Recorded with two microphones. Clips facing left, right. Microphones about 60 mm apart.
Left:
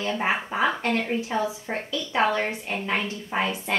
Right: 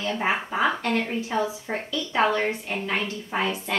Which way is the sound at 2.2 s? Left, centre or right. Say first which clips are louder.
Right 1 dB; left.